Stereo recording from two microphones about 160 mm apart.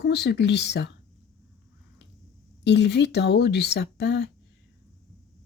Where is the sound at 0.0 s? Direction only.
90° left.